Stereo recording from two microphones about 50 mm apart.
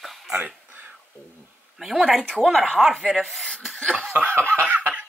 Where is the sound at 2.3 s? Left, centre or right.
Centre.